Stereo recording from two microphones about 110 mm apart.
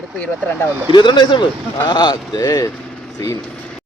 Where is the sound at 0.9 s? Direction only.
45° left (ahead or behind).